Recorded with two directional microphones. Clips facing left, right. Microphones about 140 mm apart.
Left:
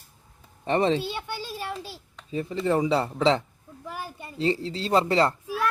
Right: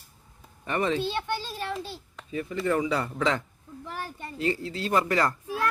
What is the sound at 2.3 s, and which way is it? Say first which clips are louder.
Speech: left 2 dB; 30° left (ahead or behind).